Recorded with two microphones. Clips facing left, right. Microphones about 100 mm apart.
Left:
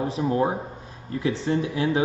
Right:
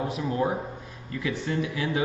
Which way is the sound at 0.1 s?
30° left (ahead or behind).